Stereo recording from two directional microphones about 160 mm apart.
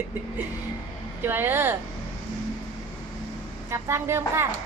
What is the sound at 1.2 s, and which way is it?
Speech, 15° right (ahead or behind).